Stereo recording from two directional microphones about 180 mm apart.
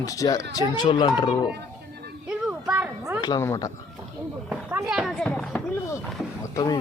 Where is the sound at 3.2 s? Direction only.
20° left (ahead or behind).